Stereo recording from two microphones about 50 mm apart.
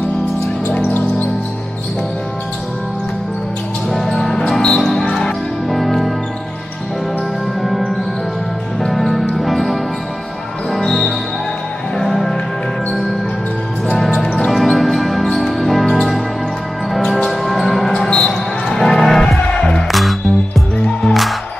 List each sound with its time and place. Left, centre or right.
3.9 s music: centre
4.6 s basketball bounce: centre
5.1 s music: centre
7.6 s music: centre
14.5 s basketball bounce: centre
15.3 s music: centre
17.9 s basketball bounce: centre
19.5 s music: centre
19.9 s music: centre